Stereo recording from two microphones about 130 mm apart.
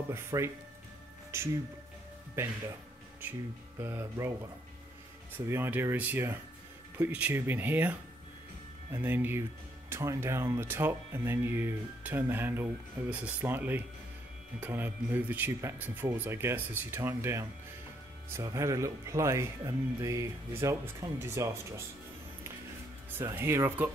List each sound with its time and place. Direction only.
0.1 s speech: 20° right (ahead or behind)
3.8 s speech: 20° right (ahead or behind)
5.4 s speech: 20° right (ahead or behind)
23.3 s speech: 20° right (ahead or behind)